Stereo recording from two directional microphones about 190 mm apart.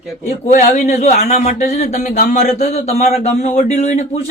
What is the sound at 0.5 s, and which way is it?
A man's voice, 40° left (ahead or behind).